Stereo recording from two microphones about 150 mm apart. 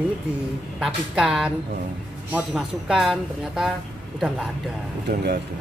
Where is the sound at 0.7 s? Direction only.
5° right (ahead or behind).